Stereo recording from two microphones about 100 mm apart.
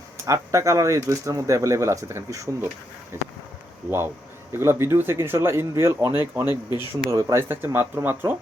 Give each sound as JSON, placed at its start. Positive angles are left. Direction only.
{"t": 0.3, "sound": "speech", "side_deg": -30}
{"t": 3.8, "sound": "speech", "side_deg": -25}
{"t": 6.7, "sound": "speech", "side_deg": -35}